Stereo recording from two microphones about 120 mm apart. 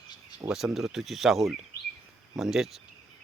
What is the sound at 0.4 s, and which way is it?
Speech, 5° right (ahead or behind).